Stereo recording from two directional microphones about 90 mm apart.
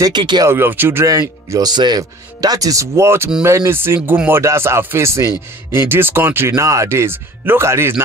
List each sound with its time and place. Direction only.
0.1 s speech: 55° right (ahead or behind)
0.5 s speech: 25° right (ahead or behind)
1.5 s speech: 50° right (ahead or behind); by 7.9 s 30° right (ahead or behind)